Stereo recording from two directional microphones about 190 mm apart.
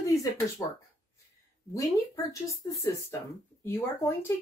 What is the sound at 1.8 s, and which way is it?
Speech, 15° left (ahead or behind).